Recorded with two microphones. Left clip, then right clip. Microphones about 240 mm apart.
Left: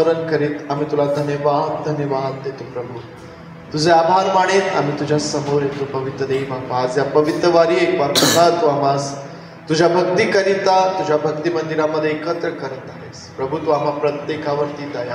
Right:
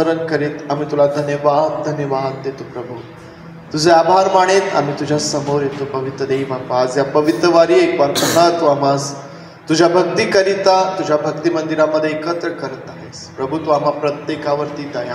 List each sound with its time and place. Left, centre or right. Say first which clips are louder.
0.0 s a man's voice: even; right
3.7 s a man's voice: right 2 dB; right
8.1 s a man's voice: left 2 dB; left
8.4 s a man's voice: right 5 dB; right